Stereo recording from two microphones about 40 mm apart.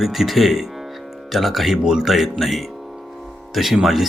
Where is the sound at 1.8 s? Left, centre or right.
Centre.